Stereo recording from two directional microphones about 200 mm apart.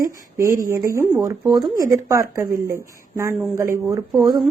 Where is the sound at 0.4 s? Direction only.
45° right (ahead or behind).